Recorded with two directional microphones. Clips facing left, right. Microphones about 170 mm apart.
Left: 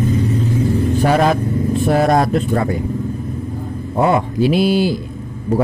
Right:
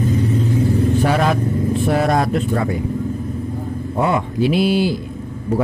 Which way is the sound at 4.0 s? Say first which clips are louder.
Left 3 dB; 40° left (ahead or behind).